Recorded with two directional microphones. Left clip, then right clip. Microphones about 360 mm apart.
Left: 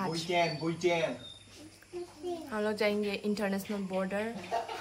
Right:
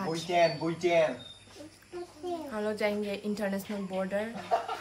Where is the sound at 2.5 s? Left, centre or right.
Centre.